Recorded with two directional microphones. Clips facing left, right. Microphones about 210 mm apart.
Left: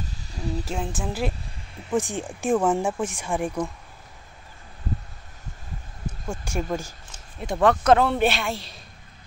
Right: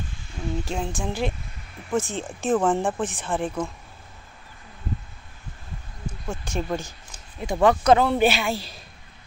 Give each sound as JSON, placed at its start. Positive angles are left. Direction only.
{"t": 0.0, "sound": "a sound", "side_deg": 40}
{"t": 0.7, "sound": "a man's voice", "side_deg": 5}
{"t": 1.9, "sound": "speech", "side_deg": 15}
{"t": 6.3, "sound": "a man's voice", "side_deg": 10}